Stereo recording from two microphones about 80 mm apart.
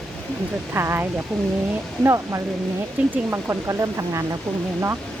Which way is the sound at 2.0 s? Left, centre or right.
Right.